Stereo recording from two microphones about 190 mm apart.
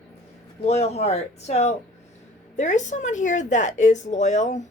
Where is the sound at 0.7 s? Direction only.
35° left (ahead or behind).